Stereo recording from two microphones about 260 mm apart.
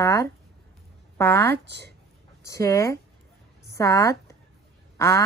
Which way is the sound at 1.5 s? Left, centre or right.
Right.